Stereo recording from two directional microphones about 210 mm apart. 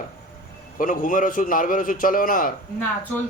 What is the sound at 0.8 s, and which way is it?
A man's voice, 40° left (ahead or behind).